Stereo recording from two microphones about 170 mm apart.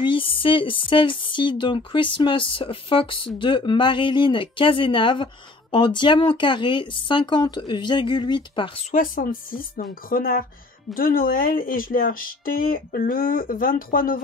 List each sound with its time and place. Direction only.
0.0 s speech: 30° left (ahead or behind)
8.9 s speech: 55° left (ahead or behind)